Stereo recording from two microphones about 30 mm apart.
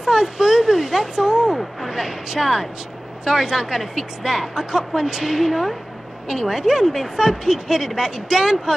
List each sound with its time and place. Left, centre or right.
0.0 s speech: centre